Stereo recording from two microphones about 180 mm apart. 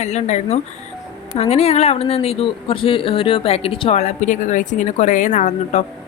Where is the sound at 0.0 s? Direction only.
40° left (ahead or behind).